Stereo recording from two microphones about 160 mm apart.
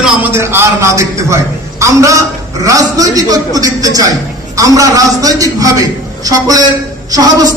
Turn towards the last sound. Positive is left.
turn(degrees=-20)  # may be behind; listen again after turning